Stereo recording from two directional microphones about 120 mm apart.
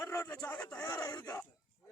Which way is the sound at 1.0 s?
30° left (ahead or behind).